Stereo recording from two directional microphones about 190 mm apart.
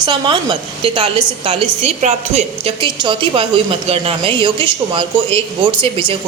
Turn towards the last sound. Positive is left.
turn(degrees=-25)  # may be behind; listen again after turning